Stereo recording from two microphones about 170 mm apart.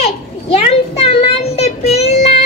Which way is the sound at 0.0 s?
40° left (ahead or behind).